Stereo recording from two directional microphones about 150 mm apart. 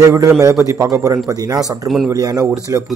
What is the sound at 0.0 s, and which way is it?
A man's voice, 20° right (ahead or behind).